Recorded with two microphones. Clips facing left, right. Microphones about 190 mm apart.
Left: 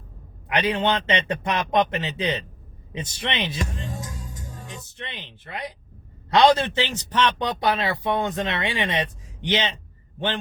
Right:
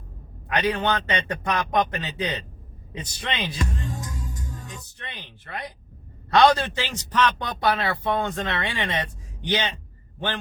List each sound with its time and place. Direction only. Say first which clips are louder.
0.4 s a man's voice: left 1 dB; 20° left (ahead or behind)